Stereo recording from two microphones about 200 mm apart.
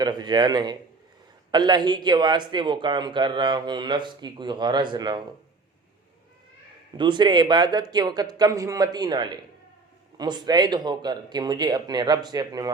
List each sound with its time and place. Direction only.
0.0 s speech: 20° right (ahead or behind)
6.9 s speech: 25° right (ahead or behind)